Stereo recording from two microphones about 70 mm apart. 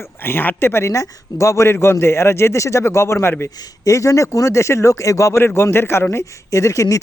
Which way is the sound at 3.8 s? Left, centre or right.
Left.